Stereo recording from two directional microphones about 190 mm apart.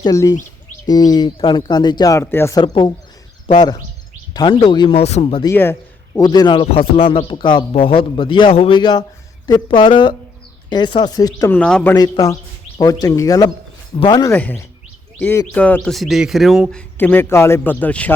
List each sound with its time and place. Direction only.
0.0 s speech: 15° left (ahead or behind)
11.5 s speech: 5° left (ahead or behind)
14.3 s speech: 10° left (ahead or behind)